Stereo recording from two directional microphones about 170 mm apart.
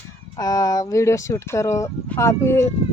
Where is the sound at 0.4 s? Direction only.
20° left (ahead or behind).